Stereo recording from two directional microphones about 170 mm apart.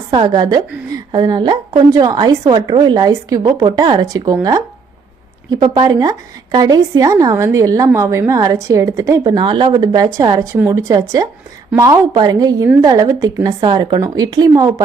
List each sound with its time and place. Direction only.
0.1 s a woman's voice: 25° right (ahead or behind)
5.6 s a woman's voice: 25° right (ahead or behind)